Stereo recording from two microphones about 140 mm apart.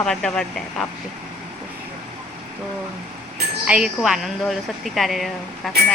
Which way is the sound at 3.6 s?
5° right (ahead or behind).